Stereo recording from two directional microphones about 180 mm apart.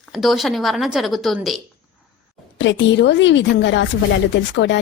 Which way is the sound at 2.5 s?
90° left.